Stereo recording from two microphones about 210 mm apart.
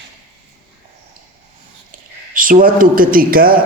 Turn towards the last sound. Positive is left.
turn(degrees=-45)  # may be behind; listen again after turning